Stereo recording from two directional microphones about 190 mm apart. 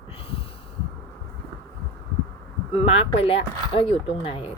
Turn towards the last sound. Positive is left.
turn(degrees=30)  # may be behind; listen again after turning